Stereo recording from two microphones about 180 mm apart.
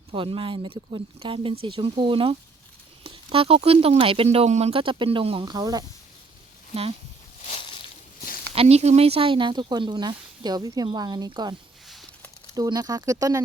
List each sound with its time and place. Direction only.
0.1 s speech: 30° right (ahead or behind)
7.4 s boat: 35° left (ahead or behind)
8.5 s speech: 35° right (ahead or behind)
12.5 s speech: 20° right (ahead or behind)